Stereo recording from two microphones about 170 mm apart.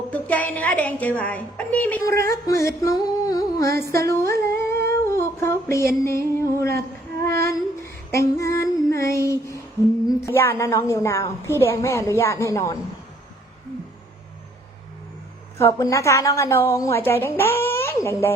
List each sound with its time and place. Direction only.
0.1 s a woman's voice: 10° left (ahead or behind)
3.9 s humming: 15° left (ahead or behind)
6.0 s female singing: 15° left (ahead or behind)
8.1 s a woman's voice: 15° left (ahead or behind)
15.5 s a woman's voice: 15° left (ahead or behind)